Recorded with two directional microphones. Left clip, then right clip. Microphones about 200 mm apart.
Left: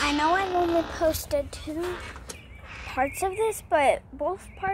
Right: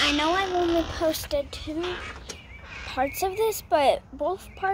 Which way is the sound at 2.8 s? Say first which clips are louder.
Even; 5° left (ahead or behind).